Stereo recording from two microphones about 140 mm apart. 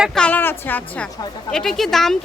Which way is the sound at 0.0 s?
5° left (ahead or behind).